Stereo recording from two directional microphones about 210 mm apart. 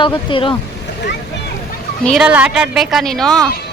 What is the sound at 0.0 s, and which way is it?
Speech, 25° left (ahead or behind).